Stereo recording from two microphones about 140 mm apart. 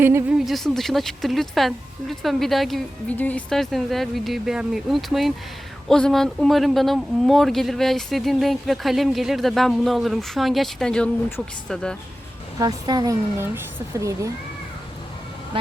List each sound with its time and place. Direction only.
0.0 s speech: 15° right (ahead or behind)
0.3 s speech: centre (ahead or behind)
12.5 s speech: 30° right (ahead or behind)